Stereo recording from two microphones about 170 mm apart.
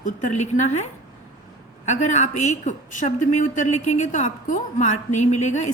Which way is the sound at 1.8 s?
45° left (ahead or behind).